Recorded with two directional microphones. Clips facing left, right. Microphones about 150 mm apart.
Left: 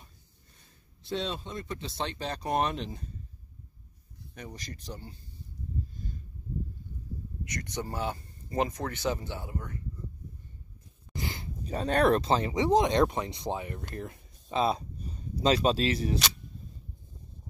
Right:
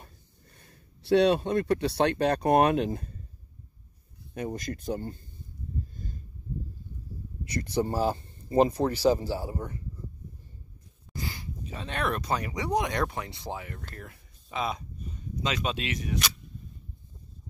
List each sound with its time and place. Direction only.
0.6 s speech: 65° right (ahead or behind)
4.3 s speech: 50° right (ahead or behind)
7.4 s speech: 30° right (ahead or behind)
11.1 s dog: 20° left (ahead or behind)
11.6 s speech: 40° left (ahead or behind)